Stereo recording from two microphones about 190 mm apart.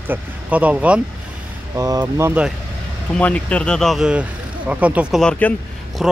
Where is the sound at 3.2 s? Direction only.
5° left (ahead or behind).